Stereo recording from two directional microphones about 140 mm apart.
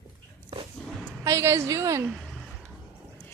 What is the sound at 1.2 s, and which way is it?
Speech, 20° right (ahead or behind).